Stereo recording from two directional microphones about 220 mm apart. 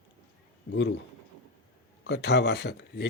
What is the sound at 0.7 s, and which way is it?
Speech, 55° left (ahead or behind).